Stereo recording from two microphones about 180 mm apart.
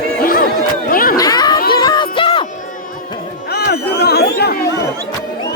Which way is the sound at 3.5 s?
65° left (ahead or behind).